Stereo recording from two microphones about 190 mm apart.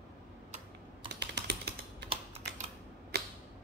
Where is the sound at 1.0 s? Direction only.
60° right (ahead or behind).